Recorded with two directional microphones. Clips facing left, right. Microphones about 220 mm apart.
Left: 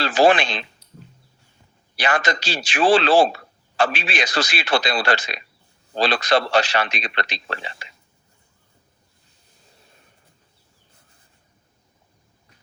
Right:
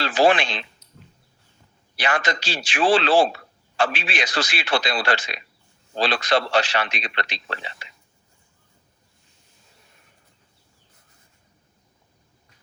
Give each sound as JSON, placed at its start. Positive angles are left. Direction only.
{"t": 0.0, "sound": "a man's voice", "side_deg": 40}
{"t": 2.0, "sound": "a man's voice", "side_deg": 40}